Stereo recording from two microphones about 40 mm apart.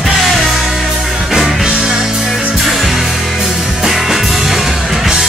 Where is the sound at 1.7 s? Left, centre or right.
Centre.